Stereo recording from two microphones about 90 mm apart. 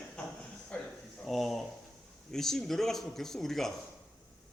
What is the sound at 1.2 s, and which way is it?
A man's voice, centre (ahead or behind).